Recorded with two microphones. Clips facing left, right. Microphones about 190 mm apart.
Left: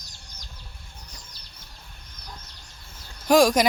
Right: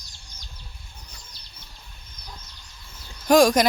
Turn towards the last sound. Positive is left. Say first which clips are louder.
# right 1 dB
turn(degrees=5)  # may be behind; listen again after turning